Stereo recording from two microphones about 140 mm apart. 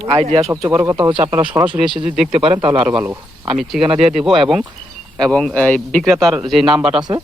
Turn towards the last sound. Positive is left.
turn(degrees=-5)  # may be behind; listen again after turning